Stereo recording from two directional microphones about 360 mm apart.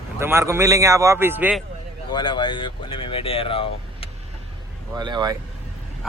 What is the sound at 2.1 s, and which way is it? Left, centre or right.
Speech, centre.